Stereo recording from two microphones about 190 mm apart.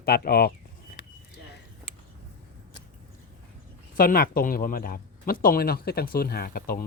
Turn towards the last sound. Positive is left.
turn(degrees=50)  # may be behind; listen again after turning